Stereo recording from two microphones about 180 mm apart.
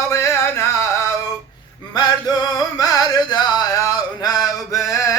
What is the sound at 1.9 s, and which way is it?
Music, 20° left (ahead or behind).